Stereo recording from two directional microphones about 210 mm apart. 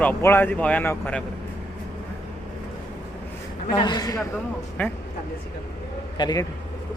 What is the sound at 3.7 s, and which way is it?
Speech, 20° left (ahead or behind).